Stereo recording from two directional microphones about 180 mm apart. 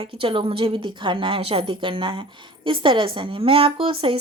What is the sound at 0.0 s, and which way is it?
A woman's voice, 30° right (ahead or behind).